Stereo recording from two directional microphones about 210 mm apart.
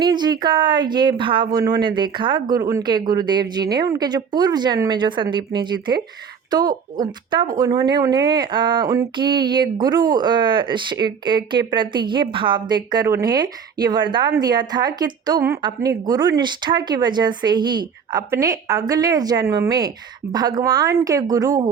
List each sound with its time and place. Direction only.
0.0 s a woman's voice: 20° right (ahead or behind)